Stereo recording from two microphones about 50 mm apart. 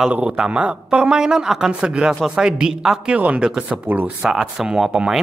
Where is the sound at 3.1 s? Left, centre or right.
Right.